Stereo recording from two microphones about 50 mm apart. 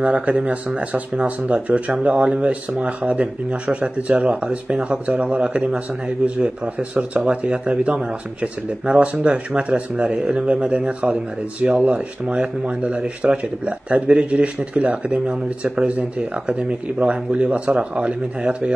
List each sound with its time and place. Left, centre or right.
0.0 s speech: right